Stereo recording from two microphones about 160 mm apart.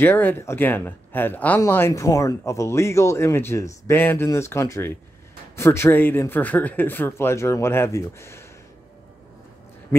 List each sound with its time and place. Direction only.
0.0 s speech: 10° left (ahead or behind)